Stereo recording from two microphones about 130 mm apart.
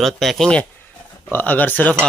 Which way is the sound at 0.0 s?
Centre (ahead or behind).